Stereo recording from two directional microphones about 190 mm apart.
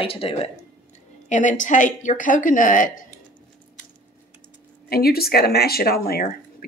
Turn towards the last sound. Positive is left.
turn(degrees=55)  # may be behind; listen again after turning